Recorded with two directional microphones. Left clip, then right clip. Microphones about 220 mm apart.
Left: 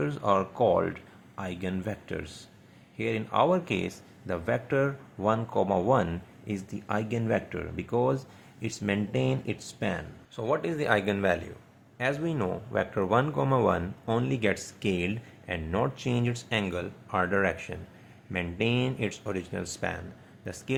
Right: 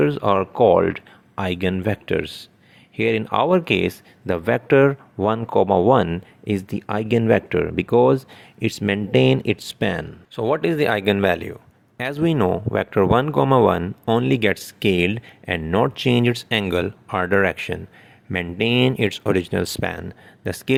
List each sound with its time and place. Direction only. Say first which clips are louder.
0.0 s speech: right 8 dB; 40° right (ahead or behind)